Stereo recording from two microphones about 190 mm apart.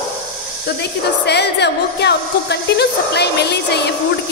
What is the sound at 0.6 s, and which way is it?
A woman's voice, 60° left (ahead or behind).